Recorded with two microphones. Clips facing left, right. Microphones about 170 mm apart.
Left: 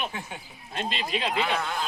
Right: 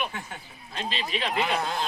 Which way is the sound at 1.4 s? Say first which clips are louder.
Right 2 dB; 15° right (ahead or behind).